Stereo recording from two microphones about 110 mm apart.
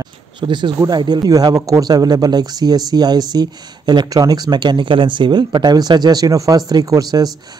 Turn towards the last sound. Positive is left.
turn(degrees=-35)  # may be behind; listen again after turning